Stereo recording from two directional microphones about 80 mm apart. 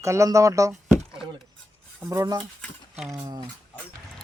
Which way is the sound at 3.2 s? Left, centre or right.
Right.